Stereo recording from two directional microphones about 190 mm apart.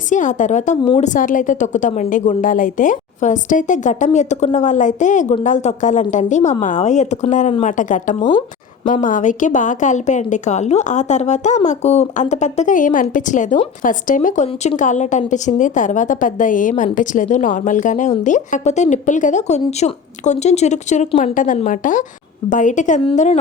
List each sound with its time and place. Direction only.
0.1 s a woman's voice: 40° left (ahead or behind)
8.2 s speech: 20° left (ahead or behind)
8.8 s a woman's voice: 45° left (ahead or behind)